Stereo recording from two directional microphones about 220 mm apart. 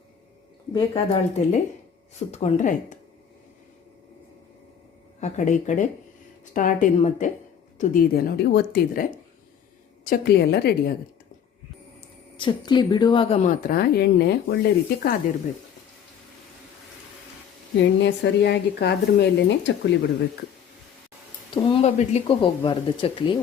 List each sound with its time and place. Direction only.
0.7 s a woman's voice: 20° left (ahead or behind)
5.2 s a woman's voice: 35° left (ahead or behind)
12.4 s a woman's voice: 20° left (ahead or behind); by 15.1 s 45° left (ahead or behind)
17.7 s speech: 50° left (ahead or behind)
21.5 s speech: 25° left (ahead or behind)